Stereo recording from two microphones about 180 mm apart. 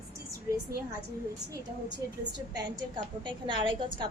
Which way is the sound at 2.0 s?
20° right (ahead or behind).